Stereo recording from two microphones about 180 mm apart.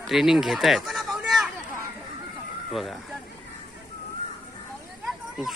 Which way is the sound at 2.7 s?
Centre (ahead or behind).